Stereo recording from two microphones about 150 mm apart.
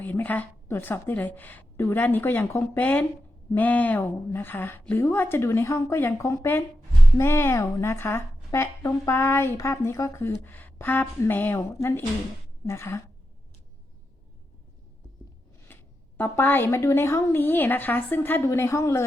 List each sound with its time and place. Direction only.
0.0 s a woman's voice: 10° left (ahead or behind)
15.6 s a woman's voice: 15° left (ahead or behind)